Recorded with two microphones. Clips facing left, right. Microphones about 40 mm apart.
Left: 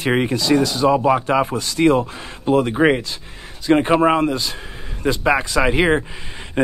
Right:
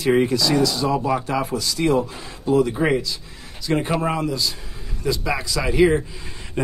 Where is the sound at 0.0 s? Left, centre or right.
Left.